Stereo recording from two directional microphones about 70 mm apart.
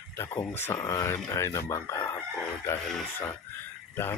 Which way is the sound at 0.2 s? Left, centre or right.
Left.